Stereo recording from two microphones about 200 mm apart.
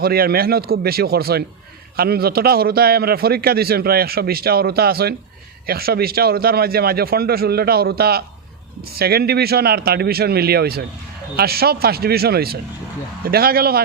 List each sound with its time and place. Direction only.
0.0 s a man's voice: 50° right (ahead or behind)